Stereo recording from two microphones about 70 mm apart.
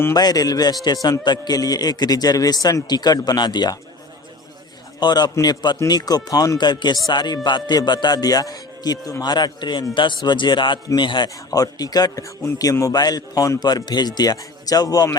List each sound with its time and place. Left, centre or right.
0.1 s a man's voice: left
1.2 s a man's voice: left
4.9 s a man's voice: left
5.3 s a man's voice: left
9.2 s speech: left
11.3 s speech: left
12.9 s speech: left
13.6 s a man's voice: left